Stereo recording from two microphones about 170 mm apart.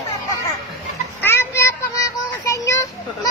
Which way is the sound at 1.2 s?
15° left (ahead or behind).